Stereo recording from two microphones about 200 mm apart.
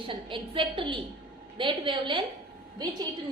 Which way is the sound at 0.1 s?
25° right (ahead or behind).